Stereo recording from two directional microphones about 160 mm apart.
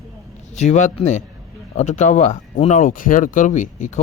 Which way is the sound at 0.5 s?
45° left (ahead or behind).